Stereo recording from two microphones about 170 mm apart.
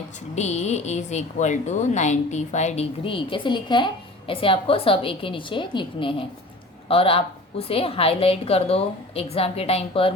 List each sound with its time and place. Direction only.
0.3 s speech: 40° left (ahead or behind)